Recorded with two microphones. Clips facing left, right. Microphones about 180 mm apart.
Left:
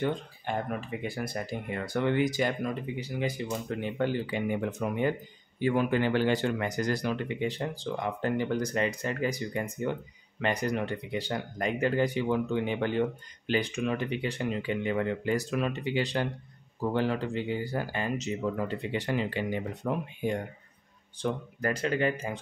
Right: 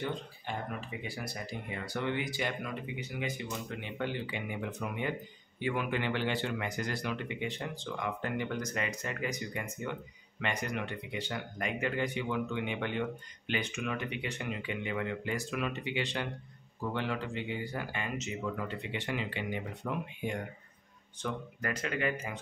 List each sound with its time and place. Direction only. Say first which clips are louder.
0.0 s speech: left 6 dB; 50° left (ahead or behind); by 22.4 s 30° left (ahead or behind)